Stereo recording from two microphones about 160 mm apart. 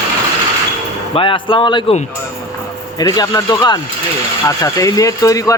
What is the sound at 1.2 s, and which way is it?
Speech, 30° left (ahead or behind).